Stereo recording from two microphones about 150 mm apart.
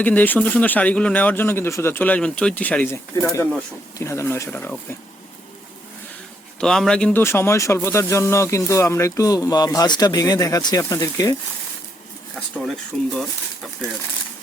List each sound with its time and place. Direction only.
0.0 s speech: 10° left (ahead or behind)
6.6 s speech: 5° left (ahead or behind)
7.2 s speech: 15° left (ahead or behind)
12.9 s speech: centre (ahead or behind)